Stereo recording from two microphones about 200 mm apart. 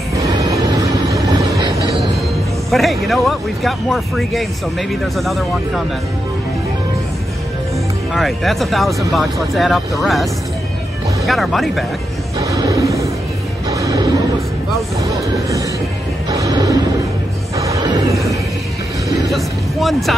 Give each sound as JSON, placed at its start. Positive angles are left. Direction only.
{"t": 0.2, "sound": "vehicle", "side_deg": -15}
{"t": 2.7, "sound": "speech", "side_deg": 0}
{"t": 8.1, "sound": "speech", "side_deg": 0}
{"t": 12.4, "sound": "music", "side_deg": -15}
{"t": 16.3, "sound": "a sound", "side_deg": -20}
{"t": 19.3, "sound": "speech", "side_deg": 0}